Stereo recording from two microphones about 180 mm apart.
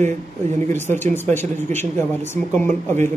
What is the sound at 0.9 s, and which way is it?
Speech, 10° left (ahead or behind).